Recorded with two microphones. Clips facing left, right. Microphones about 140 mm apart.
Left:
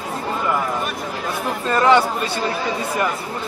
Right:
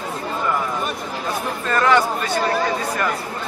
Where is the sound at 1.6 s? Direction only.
25° left (ahead or behind).